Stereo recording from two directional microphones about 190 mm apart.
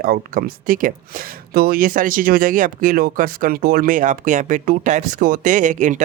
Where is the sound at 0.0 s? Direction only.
50° right (ahead or behind).